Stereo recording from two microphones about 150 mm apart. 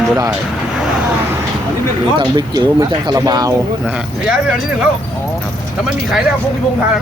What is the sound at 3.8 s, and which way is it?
Speech, 5° right (ahead or behind).